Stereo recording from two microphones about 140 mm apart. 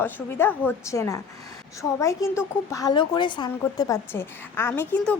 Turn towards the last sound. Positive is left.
turn(degrees=10)  # may be behind; listen again after turning